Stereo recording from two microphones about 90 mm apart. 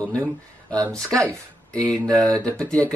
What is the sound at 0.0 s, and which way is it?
Speech, 35° right (ahead or behind).